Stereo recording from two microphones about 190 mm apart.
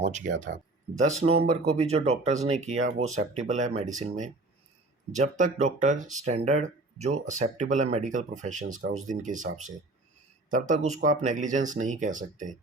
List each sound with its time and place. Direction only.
0.0 s speech: 40° right (ahead or behind)
5.1 s speech: 40° right (ahead or behind)